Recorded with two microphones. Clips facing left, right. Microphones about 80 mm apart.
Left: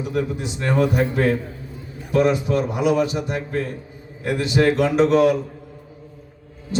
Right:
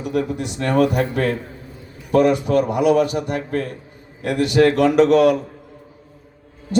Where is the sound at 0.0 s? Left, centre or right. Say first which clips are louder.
Right 2 dB; right.